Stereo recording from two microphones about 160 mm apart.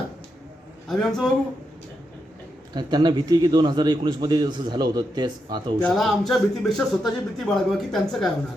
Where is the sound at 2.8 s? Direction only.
25° right (ahead or behind).